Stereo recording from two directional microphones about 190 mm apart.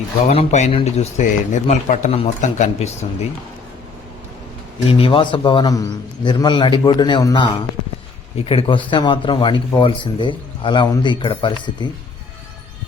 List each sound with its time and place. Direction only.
0.3 s a man's voice: 35° left (ahead or behind)
4.9 s speech: 30° left (ahead or behind)